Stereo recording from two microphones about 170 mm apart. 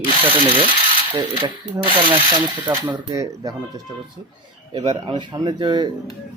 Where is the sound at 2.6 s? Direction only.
10° right (ahead or behind).